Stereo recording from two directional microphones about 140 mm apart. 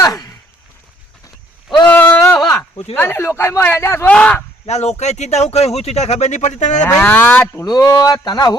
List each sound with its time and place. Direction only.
0.0 s sigh: 25° left (ahead or behind)
1.8 s a sound: 10° left (ahead or behind)
2.9 s speech: 15° left (ahead or behind)
4.6 s speech: 50° left (ahead or behind)
6.9 s speech: 10° left (ahead or behind)
7.5 s speech: 25° left (ahead or behind)